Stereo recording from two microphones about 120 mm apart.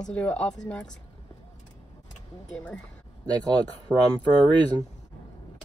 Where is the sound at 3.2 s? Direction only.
35° right (ahead or behind).